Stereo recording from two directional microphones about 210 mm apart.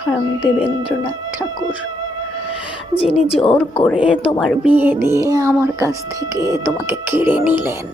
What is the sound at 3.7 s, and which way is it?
Speech, centre (ahead or behind).